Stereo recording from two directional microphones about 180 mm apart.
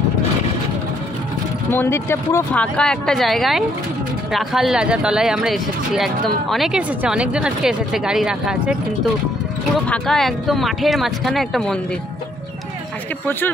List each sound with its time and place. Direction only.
1.7 s speech: 15° left (ahead or behind); by 8.7 s 5° right (ahead or behind)
9.8 s speech: centre (ahead or behind)